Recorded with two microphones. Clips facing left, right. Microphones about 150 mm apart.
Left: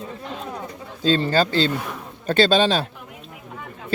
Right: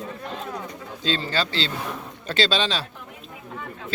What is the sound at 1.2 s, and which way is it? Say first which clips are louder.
Speech: left 7 dB; 50° left (ahead or behind).